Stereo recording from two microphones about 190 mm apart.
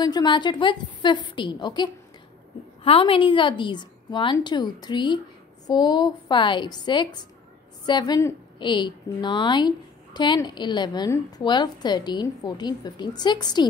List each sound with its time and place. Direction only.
0.0 s a woman's voice: 20° left (ahead or behind)